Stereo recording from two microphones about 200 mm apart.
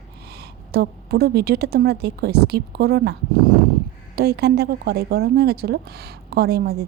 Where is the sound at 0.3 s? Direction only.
55° right (ahead or behind).